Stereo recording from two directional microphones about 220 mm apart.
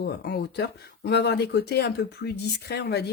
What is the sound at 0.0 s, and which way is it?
Speech, 50° left (ahead or behind).